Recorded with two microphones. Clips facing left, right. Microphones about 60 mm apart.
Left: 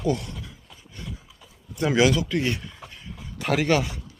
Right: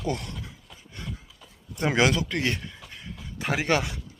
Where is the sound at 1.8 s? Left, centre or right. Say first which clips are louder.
Left 2 dB; right.